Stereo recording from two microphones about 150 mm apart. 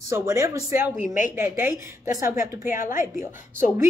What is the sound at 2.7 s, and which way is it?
Speech, 60° left (ahead or behind).